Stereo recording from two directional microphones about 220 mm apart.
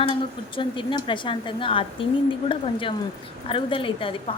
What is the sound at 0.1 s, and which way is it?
A woman's voice, 20° left (ahead or behind).